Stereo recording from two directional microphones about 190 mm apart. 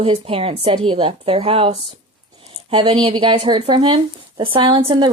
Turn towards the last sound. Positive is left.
turn(degrees=-25)  # may be behind; listen again after turning